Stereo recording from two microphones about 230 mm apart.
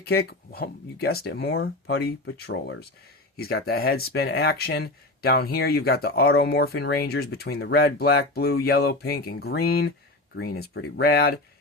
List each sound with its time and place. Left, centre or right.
0.0 s speech: left